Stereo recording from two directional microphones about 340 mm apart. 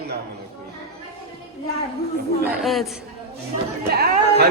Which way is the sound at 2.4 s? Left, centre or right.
Centre.